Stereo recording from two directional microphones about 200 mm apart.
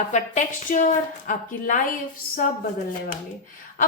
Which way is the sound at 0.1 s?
40° left (ahead or behind).